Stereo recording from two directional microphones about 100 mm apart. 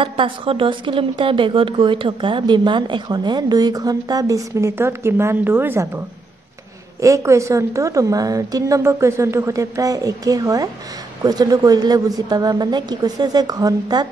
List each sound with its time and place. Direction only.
0.0 s a woman's voice: 60° right (ahead or behind); by 5.9 s 20° right (ahead or behind)
7.0 s a woman's voice: 30° right (ahead or behind)